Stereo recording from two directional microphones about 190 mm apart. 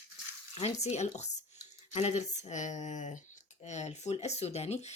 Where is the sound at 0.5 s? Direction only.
35° left (ahead or behind).